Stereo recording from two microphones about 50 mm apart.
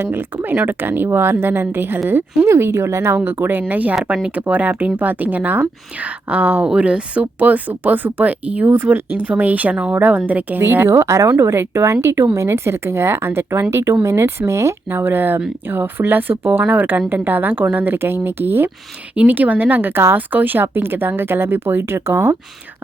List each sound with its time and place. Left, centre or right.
0.0 s speech: right
2.5 s speech: right
3.2 s speech: right
3.6 s speech: right
4.0 s speech: right
4.4 s speech: right
6.7 s speech: right
10.8 s speech: right
11.3 s speech: right
14.8 s speech: right
19.3 s speech: right
20.1 s speech: right